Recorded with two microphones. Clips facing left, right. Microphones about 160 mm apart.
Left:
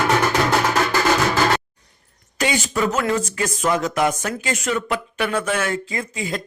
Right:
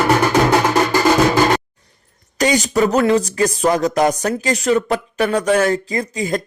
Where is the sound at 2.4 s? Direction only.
40° right (ahead or behind).